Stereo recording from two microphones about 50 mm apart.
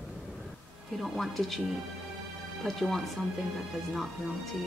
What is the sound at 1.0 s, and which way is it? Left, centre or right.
Speech, centre.